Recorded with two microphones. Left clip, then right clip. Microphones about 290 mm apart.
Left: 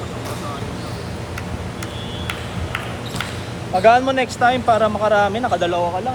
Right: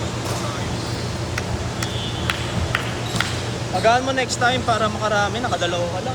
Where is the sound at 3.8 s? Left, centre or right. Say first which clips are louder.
Left 4 dB; left.